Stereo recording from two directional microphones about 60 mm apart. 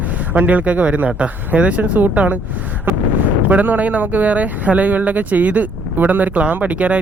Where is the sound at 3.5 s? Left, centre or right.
Right.